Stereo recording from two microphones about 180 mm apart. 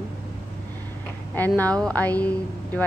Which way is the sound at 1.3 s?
10° left (ahead or behind).